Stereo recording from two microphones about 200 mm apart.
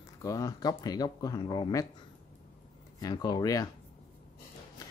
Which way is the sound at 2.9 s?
20° left (ahead or behind).